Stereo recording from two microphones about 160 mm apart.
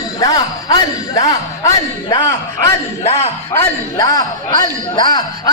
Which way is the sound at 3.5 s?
25° left (ahead or behind).